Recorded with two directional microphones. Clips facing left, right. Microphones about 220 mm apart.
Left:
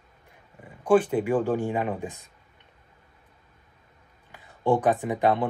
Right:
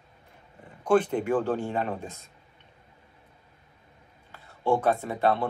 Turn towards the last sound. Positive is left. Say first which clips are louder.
# left 2 dB
turn(degrees=15)  # may be behind; listen again after turning